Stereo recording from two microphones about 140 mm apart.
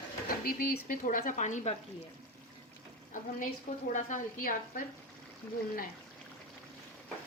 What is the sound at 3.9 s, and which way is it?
Speech, 65° left (ahead or behind).